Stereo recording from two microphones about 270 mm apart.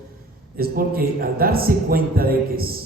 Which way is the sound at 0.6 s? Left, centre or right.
Right.